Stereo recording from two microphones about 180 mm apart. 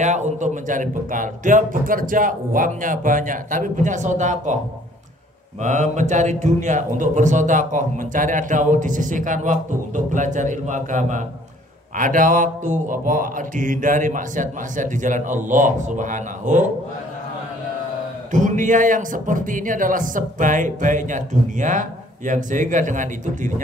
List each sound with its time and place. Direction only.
0.0 s speech: 40° right (ahead or behind)
5.6 s speech: 40° right (ahead or behind)
18.3 s speech: 45° right (ahead or behind)